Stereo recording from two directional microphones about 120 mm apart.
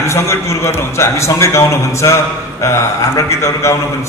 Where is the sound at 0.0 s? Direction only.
25° left (ahead or behind).